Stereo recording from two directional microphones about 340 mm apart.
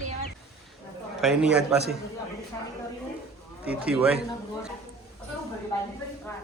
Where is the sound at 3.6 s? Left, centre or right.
Centre.